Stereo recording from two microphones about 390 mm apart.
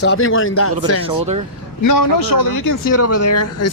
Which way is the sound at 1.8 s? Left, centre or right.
Left.